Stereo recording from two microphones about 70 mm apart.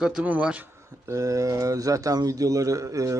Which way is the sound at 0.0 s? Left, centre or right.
Centre.